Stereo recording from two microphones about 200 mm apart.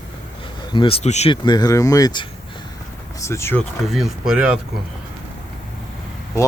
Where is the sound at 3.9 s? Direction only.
Centre (ahead or behind).